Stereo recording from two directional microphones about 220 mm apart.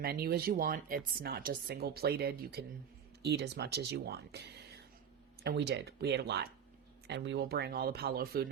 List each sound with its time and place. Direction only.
0.0 s speech: 45° right (ahead or behind)